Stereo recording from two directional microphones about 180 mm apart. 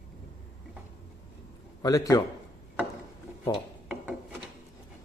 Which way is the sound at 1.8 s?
20° left (ahead or behind).